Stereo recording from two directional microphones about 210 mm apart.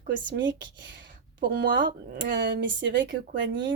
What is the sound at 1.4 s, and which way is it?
Speech, 50° right (ahead or behind).